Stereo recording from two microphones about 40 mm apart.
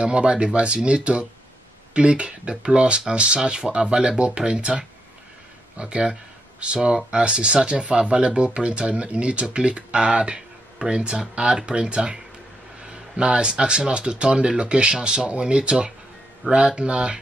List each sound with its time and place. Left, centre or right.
0.0 s speech: right